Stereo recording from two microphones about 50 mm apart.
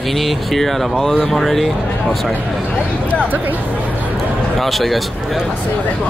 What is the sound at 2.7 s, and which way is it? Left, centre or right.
Speech, left.